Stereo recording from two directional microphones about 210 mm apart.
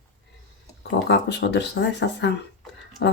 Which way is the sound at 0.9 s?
55° left (ahead or behind).